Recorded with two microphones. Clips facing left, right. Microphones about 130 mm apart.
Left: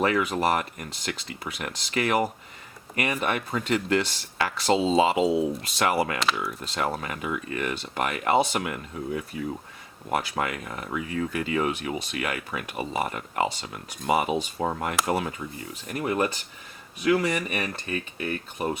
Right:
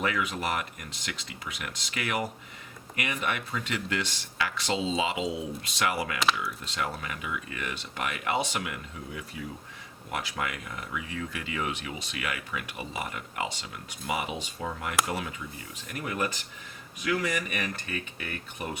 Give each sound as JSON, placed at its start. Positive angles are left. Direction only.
{"t": 0.0, "sound": "speech", "side_deg": 35}